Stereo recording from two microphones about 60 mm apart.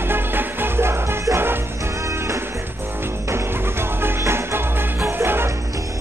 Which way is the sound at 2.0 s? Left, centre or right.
Right.